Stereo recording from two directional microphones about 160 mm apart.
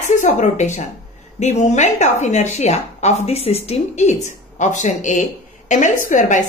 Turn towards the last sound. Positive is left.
turn(degrees=50)  # may be behind; listen again after turning